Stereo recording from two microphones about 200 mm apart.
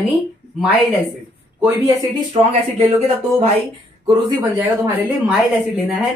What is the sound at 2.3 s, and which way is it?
Speech, 30° right (ahead or behind).